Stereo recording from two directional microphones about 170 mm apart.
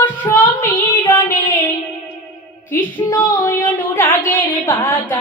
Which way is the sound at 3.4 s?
15° left (ahead or behind).